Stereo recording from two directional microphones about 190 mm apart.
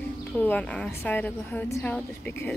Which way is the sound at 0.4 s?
10° left (ahead or behind).